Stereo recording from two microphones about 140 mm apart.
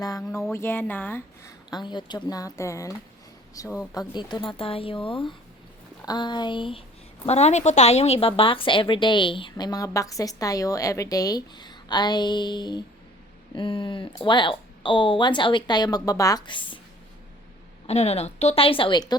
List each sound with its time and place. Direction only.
0.5 s speech: 15° left (ahead or behind)
1.7 s a woman's voice: 30° left (ahead or behind)
7.3 s a woman's voice: 50° left (ahead or behind); by 16.7 s 35° left (ahead or behind)
17.8 s a woman's voice: 50° left (ahead or behind); by 19.1 s 30° left (ahead or behind)